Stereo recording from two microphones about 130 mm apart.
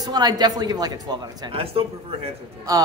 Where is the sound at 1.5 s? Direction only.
45° right (ahead or behind).